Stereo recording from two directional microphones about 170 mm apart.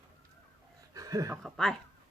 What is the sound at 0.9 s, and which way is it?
Chuckle, 20° right (ahead or behind).